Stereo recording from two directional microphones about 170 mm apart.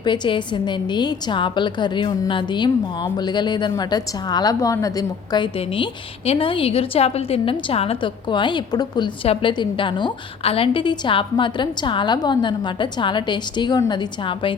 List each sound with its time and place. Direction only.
0.0 s a woman's voice: 25° left (ahead or behind)